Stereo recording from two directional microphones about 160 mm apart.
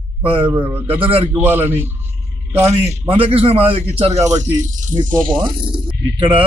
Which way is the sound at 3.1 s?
35° right (ahead or behind).